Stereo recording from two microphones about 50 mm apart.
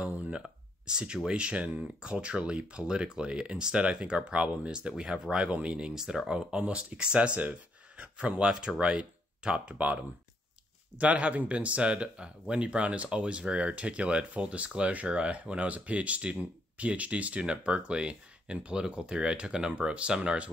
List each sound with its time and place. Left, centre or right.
0.0 s a sound: right
0.8 s speech: centre
9.8 s speech: right